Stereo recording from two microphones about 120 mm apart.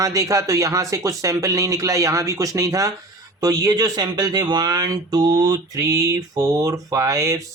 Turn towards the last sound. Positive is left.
turn(degrees=-25)  # may be behind; listen again after turning